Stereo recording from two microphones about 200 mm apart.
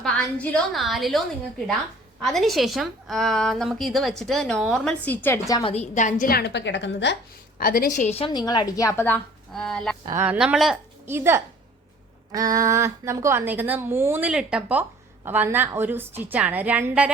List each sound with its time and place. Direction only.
0.0 s a woman's voice: 5° left (ahead or behind)
2.2 s a woman's voice: centre (ahead or behind); by 5.7 s 15° left (ahead or behind)
5.7 s a woman's voice: 35° left (ahead or behind); by 7.2 s 60° left (ahead or behind)
7.6 s a woman's voice: 45° left (ahead or behind); by 9.9 s centre (ahead or behind)
10.1 s a woman's voice: 10° right (ahead or behind)